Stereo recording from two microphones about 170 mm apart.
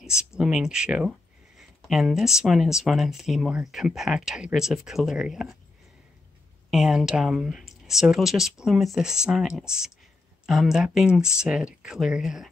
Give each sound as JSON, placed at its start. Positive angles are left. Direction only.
{"t": 0.4, "sound": "speech", "side_deg": -5}
{"t": 6.7, "sound": "speech", "side_deg": 0}